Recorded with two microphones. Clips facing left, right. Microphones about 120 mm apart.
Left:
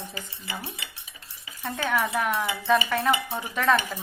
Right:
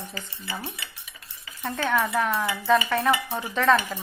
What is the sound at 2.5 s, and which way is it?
Speech, 20° left (ahead or behind).